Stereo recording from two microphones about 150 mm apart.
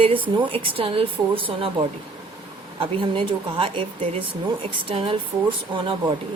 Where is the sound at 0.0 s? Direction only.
35° right (ahead or behind).